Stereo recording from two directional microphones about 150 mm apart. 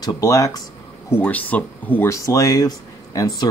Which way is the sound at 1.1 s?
10° left (ahead or behind).